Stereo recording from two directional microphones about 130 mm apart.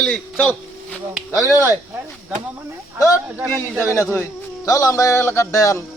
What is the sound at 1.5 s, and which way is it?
Speech, 25° left (ahead or behind).